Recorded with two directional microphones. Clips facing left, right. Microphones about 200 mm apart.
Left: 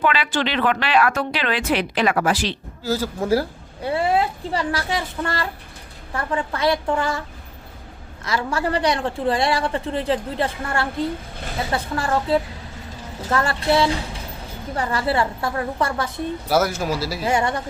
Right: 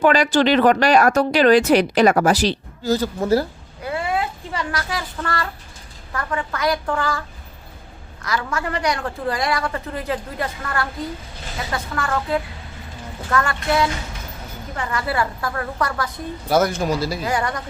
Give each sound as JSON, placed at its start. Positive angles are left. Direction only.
{"t": 0.0, "sound": "speech", "side_deg": -45}
{"t": 2.8, "sound": "speech", "side_deg": 5}
{"t": 3.8, "sound": "a woman's voice", "side_deg": 30}
{"t": 8.4, "sound": "a woman's voice", "side_deg": 30}
{"t": 16.5, "sound": "speech", "side_deg": 5}
{"t": 17.2, "sound": "a woman's voice", "side_deg": 25}